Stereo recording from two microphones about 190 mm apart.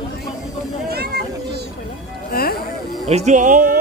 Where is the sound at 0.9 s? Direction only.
55° right (ahead or behind).